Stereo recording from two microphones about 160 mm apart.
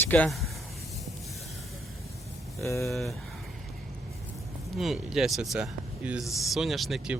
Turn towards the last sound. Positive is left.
turn(degrees=0)  # may be behind; listen again after turning